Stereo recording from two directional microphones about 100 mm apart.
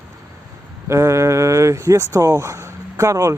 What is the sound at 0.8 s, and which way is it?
Speech, 30° right (ahead or behind).